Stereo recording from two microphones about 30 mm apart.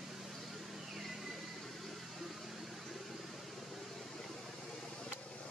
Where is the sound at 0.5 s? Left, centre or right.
Centre.